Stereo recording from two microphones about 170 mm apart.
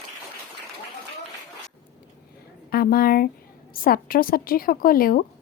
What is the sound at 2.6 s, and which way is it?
A woman's voice, 60° left (ahead or behind).